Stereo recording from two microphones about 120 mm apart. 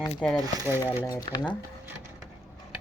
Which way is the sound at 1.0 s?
30° left (ahead or behind).